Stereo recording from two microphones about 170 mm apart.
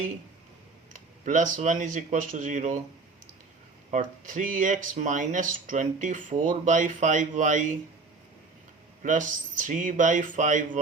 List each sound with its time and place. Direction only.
0.9 s speech: 45° right (ahead or behind)
3.9 s speech: 50° right (ahead or behind)
9.0 s speech: 50° right (ahead or behind)